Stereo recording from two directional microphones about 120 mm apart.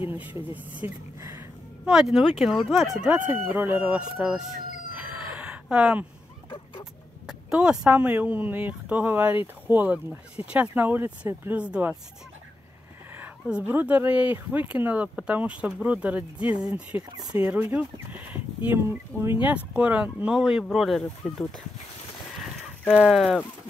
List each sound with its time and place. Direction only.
0.2 s speech: 15° right (ahead or behind)
1.9 s speech: centre (ahead or behind)
3.3 s speech: 15° right (ahead or behind)
4.9 s a sound: 10° right (ahead or behind)
6.5 s a sound: 40° left (ahead or behind)
7.2 s speech: 5° right (ahead or behind)
13.2 s speech: 10° right (ahead or behind); by 21.5 s 5° left (ahead or behind)
22.9 s speech: 5° right (ahead or behind)